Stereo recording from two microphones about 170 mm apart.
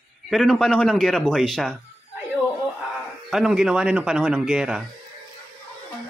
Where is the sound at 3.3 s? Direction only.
Centre (ahead or behind).